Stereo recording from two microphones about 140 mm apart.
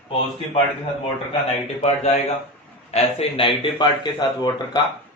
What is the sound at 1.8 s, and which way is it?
A man's voice, 50° left (ahead or behind).